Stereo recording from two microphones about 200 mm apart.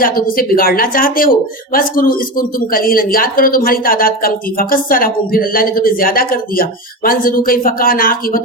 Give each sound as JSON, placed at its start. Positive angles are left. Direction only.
{"t": 0.0, "sound": "speech", "side_deg": 45}